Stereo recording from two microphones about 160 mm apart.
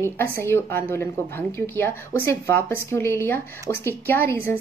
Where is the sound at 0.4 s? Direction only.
15° left (ahead or behind).